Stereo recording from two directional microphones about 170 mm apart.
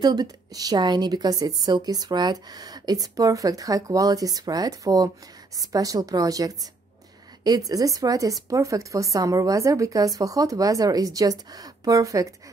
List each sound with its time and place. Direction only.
0.0 s a woman's voice: 25° right (ahead or behind)